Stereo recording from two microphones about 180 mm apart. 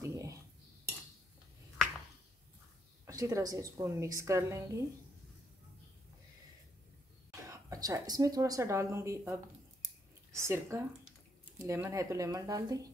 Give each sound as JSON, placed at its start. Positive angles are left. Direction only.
{"t": 0.0, "sound": "cutlery", "side_deg": -15}
{"t": 3.1, "sound": "a woman's voice", "side_deg": -15}
{"t": 7.2, "sound": "a woman's voice", "side_deg": -20}